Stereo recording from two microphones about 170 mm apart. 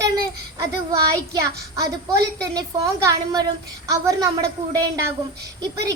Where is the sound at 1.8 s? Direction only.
70° right (ahead or behind).